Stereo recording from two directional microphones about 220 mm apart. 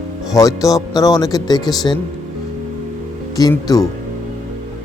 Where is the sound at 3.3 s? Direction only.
15° left (ahead or behind).